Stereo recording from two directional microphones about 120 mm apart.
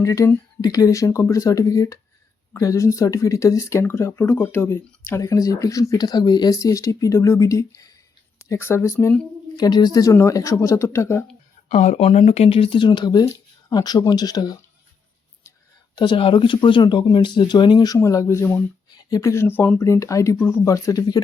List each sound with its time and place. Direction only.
0.0 s speech: 25° left (ahead or behind)
9.6 s speech: 35° left (ahead or behind)
11.7 s speech: 80° left
12.0 s speech: 60° left (ahead or behind); by 14.5 s 35° left (ahead or behind)
16.0 s speech: 45° left (ahead or behind); by 18.6 s 20° left (ahead or behind)
18.9 s speech: 35° left (ahead or behind); by 19.8 s 15° left (ahead or behind)
19.8 s speech: 25° left (ahead or behind)